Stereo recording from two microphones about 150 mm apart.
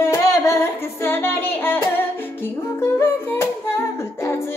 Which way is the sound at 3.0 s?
15° left (ahead or behind).